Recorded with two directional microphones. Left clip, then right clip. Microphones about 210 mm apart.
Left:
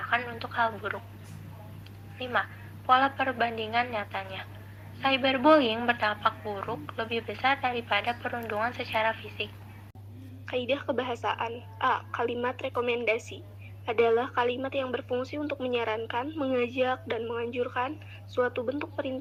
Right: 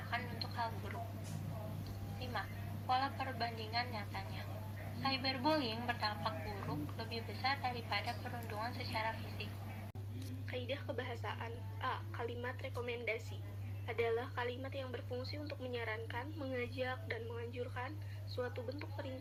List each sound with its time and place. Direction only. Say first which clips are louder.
0.1 s telephone: left 11 dB; 50° left (ahead or behind)
2.1 s a woman's voice: left 15 dB; 50° left (ahead or behind)
10.5 s a woman's voice: left 14 dB; 50° left (ahead or behind)
14.3 s a woman's voice: left 14 dB; 50° left (ahead or behind)